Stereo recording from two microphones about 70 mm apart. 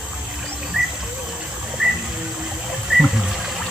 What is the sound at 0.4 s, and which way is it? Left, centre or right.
Rodents, centre.